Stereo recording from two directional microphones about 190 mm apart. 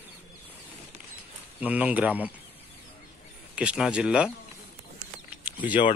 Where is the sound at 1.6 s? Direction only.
10° right (ahead or behind).